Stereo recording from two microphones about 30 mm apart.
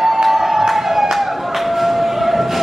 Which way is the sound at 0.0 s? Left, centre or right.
Centre.